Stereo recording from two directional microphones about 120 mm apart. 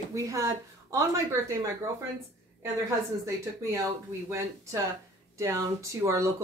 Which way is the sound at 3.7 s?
30° right (ahead or behind).